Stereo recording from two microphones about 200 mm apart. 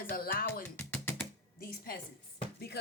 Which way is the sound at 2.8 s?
55° left (ahead or behind).